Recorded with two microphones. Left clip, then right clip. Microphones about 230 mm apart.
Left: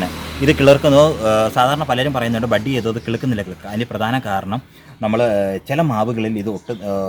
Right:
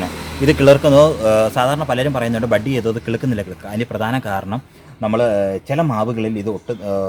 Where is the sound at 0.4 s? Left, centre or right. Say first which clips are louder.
Right 1 dB; centre.